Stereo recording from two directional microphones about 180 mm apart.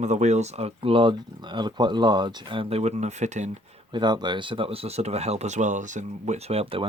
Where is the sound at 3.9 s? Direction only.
25° right (ahead or behind).